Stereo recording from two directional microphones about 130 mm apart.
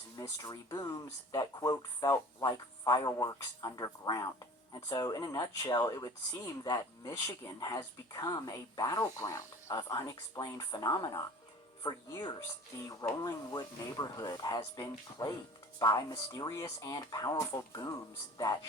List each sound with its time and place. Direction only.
0.2 s speech: 30° left (ahead or behind)